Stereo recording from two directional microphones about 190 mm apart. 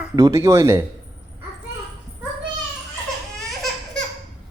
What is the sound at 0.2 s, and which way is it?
Speech, 15° right (ahead or behind).